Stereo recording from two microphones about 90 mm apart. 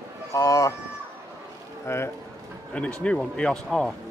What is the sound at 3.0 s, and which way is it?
Speech, 10° left (ahead or behind).